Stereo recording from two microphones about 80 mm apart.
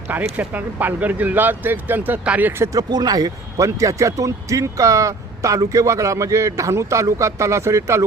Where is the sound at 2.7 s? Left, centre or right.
Right.